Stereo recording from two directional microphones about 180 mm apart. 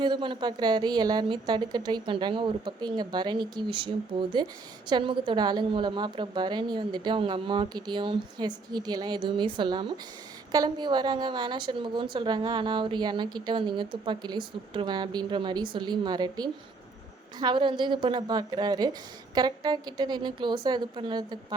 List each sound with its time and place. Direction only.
0.0 s a woman's voice: 25° right (ahead or behind)